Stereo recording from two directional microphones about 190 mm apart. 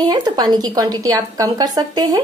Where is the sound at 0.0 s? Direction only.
20° right (ahead or behind).